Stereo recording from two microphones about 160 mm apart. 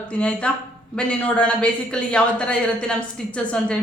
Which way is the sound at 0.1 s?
5° left (ahead or behind).